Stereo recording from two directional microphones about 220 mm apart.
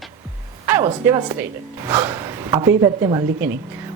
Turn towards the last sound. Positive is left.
turn(degrees=-15)  # may be behind; listen again after turning